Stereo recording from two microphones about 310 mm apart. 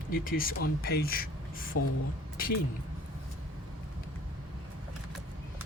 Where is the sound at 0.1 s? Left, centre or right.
Left.